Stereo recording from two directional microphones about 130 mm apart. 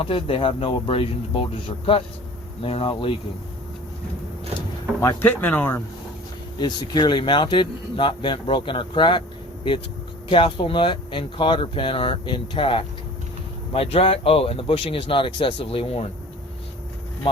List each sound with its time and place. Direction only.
0.0 s speech: 45° left (ahead or behind)
2.6 s speech: 45° left (ahead or behind)
4.9 s speech: 20° left (ahead or behind)
6.6 s speech: 35° left (ahead or behind)
10.2 s speech: 40° left (ahead or behind)